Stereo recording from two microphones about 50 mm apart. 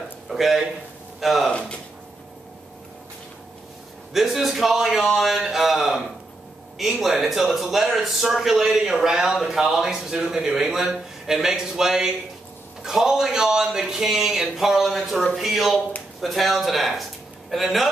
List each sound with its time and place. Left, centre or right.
0.3 s a man's voice: centre
1.5 s speech: left
4.1 s a man's voice: centre